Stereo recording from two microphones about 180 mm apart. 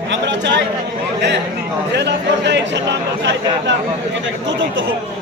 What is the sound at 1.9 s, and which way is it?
Speech, 75° right (ahead or behind).